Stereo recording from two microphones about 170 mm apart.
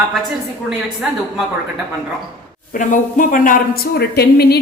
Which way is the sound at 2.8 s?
50° left (ahead or behind).